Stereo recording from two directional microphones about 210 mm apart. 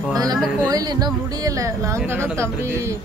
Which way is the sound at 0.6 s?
20° right (ahead or behind).